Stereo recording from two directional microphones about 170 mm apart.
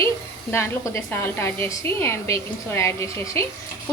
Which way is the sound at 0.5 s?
15° left (ahead or behind).